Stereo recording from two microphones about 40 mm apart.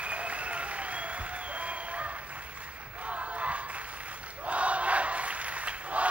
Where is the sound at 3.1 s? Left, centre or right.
Right.